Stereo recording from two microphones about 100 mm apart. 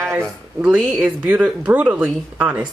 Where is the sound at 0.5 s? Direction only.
10° right (ahead or behind).